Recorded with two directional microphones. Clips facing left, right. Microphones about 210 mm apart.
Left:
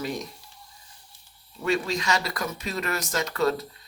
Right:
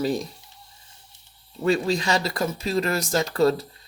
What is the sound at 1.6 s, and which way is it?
Speech, 30° right (ahead or behind).